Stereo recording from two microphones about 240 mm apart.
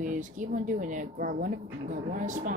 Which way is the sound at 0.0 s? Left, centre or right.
Right.